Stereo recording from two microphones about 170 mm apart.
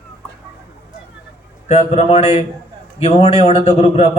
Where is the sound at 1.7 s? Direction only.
40° left (ahead or behind).